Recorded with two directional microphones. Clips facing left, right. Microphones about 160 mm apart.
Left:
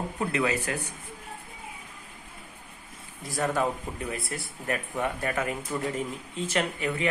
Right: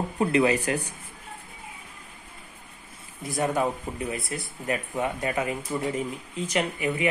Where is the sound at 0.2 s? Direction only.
30° right (ahead or behind).